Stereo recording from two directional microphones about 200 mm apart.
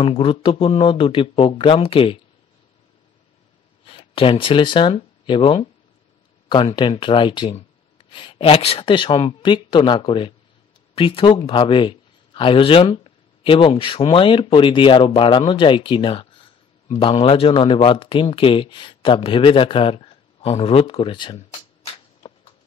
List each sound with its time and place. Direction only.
0.0 s speech: 25° left (ahead or behind)
3.8 s speech: 25° left (ahead or behind)